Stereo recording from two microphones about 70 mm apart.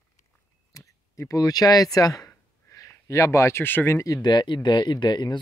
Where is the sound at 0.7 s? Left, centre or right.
Left.